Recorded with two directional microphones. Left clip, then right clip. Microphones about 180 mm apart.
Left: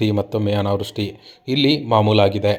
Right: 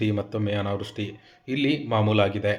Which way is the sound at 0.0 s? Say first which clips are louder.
Left 7 dB; 40° left (ahead or behind).